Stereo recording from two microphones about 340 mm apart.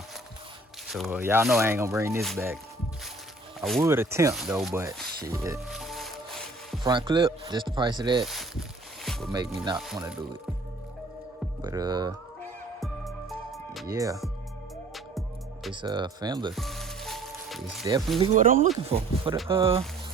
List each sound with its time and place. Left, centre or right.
0.9 s speech: centre
3.6 s speech: centre
6.8 s speech: centre
8.2 s speech: centre
9.0 s music: centre
9.3 s speech: centre
11.6 s speech: centre
12.4 s music: centre
13.9 s speech: centre
15.7 s speech: centre
16.5 s music: centre
18.2 s speech: right